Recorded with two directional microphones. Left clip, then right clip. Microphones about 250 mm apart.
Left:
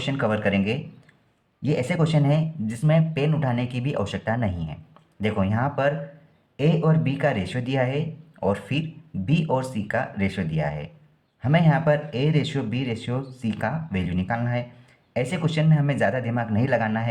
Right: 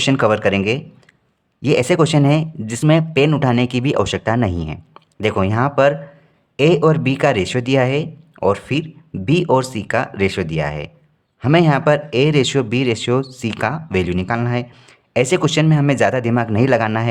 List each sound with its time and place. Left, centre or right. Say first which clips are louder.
0.0 s speech: right 9 dB; right